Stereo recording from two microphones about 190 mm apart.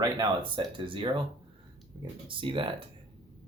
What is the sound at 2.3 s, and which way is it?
Speech, 25° right (ahead or behind).